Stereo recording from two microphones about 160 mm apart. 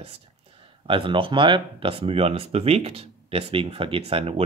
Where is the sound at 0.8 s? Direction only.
30° right (ahead or behind).